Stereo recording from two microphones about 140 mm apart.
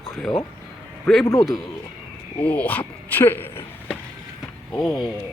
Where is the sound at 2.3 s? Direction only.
10° left (ahead or behind).